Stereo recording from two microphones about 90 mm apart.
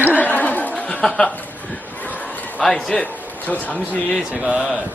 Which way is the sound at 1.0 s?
10° left (ahead or behind).